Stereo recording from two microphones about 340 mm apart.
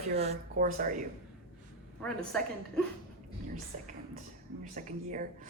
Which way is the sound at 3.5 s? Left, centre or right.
Right.